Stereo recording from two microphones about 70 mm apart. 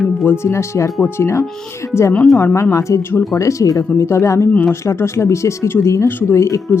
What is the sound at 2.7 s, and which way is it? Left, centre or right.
Speech, left.